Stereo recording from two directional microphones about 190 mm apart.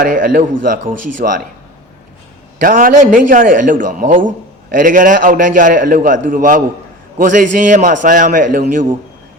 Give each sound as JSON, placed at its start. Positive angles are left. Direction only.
{"t": 0.0, "sound": "a man's voice", "side_deg": -45}
{"t": 2.6, "sound": "a man's voice", "side_deg": -45}